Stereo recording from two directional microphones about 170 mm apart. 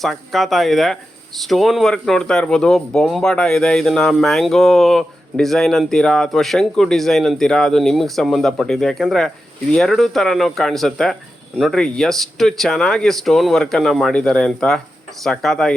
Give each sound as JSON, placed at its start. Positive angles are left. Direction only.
{"t": 0.0, "sound": "speech", "side_deg": 0}